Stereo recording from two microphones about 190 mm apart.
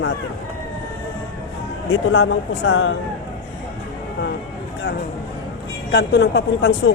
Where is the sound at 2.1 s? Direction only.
90° left.